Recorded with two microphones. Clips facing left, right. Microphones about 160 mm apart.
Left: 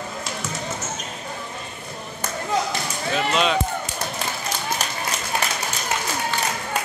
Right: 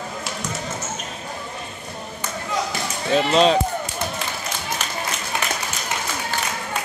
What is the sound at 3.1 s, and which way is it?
Speech, 35° right (ahead or behind).